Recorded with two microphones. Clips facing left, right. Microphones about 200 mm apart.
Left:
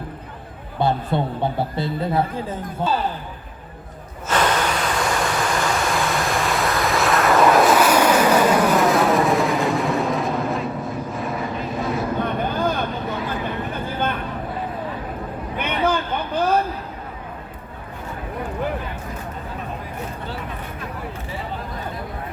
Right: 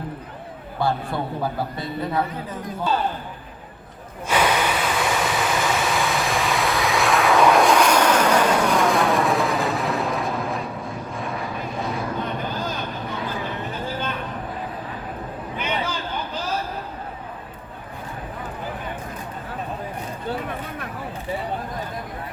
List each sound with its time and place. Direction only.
0.8 s a man's voice: 20° left (ahead or behind)
4.3 s vehicle: 10° right (ahead or behind)
12.2 s vehicle: 55° left (ahead or behind)
15.5 s a sound: 55° left (ahead or behind)